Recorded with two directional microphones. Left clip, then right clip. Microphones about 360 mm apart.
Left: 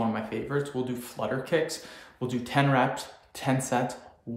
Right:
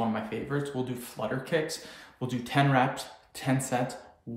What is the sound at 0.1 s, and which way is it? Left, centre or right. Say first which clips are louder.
Speech: left 2 dB; centre.